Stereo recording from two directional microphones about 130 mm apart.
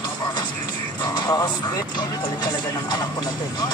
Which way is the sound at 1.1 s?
25° left (ahead or behind).